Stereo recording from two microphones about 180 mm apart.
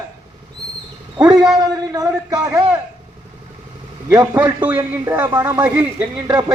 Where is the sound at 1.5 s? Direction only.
20° right (ahead or behind).